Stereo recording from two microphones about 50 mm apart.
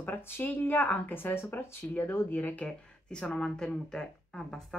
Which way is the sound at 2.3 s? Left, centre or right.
Left.